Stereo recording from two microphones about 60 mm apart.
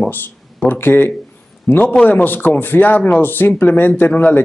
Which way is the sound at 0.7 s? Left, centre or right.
Left.